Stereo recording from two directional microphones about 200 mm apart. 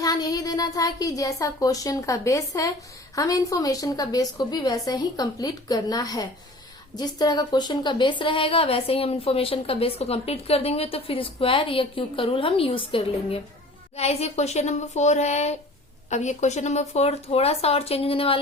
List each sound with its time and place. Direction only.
0.0 s a woman's voice: 20° left (ahead or behind)